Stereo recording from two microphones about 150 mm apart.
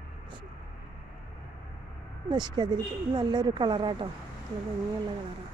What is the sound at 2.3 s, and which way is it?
Speech, 30° right (ahead or behind).